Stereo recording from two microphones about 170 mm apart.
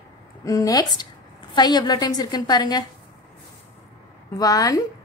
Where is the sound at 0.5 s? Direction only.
20° left (ahead or behind).